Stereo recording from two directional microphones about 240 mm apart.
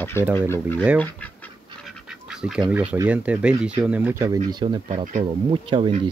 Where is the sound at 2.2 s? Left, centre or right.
Centre.